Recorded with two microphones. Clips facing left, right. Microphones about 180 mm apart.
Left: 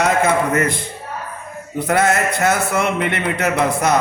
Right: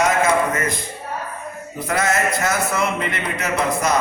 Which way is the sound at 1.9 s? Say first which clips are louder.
Left 3 dB; 65° left (ahead or behind).